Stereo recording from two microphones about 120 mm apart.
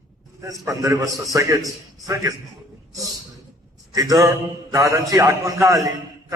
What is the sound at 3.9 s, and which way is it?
A man's voice, 25° right (ahead or behind).